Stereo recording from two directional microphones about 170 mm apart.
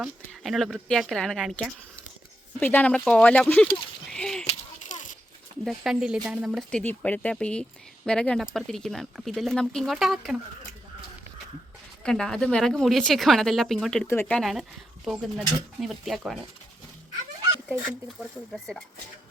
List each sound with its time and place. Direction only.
0.0 s speech: centre (ahead or behind)
2.6 s speech: 10° left (ahead or behind)
4.1 s a sound: 5° left (ahead or behind)
4.4 s a sound: 45° left (ahead or behind)
5.6 s speech: centre (ahead or behind)
12.0 s speech: 5° left (ahead or behind)